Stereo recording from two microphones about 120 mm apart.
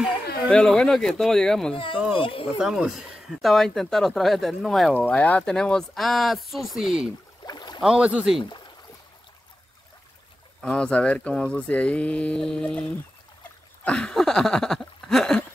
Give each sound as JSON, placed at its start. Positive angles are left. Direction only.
{"t": 0.5, "sound": "speech", "side_deg": 5}
{"t": 2.1, "sound": "speech", "side_deg": 50}
{"t": 2.6, "sound": "speech", "side_deg": -5}
{"t": 5.0, "sound": "speech", "side_deg": 10}
{"t": 7.4, "sound": "boat", "side_deg": 35}
{"t": 7.8, "sound": "speech", "side_deg": -10}
{"t": 8.4, "sound": "speech", "side_deg": 40}
{"t": 10.6, "sound": "speech", "side_deg": 10}
{"t": 13.8, "sound": "speech", "side_deg": 10}